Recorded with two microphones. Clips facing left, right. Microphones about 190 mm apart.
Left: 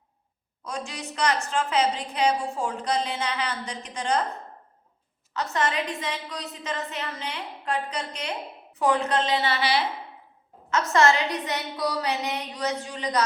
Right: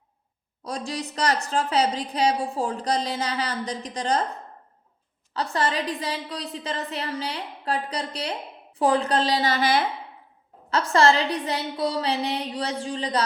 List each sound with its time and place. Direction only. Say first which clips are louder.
0.6 s a woman's voice: right 4 dB; 35° right (ahead or behind)
5.3 s a woman's voice: right 1 dB; 30° right (ahead or behind)
10.7 s a woman's voice: right 1 dB; 30° right (ahead or behind)